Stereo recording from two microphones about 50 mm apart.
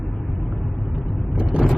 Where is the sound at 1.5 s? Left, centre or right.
Right.